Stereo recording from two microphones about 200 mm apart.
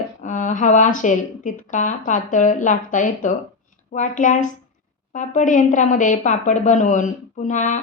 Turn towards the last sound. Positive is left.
turn(degrees=35)  # may be behind; listen again after turning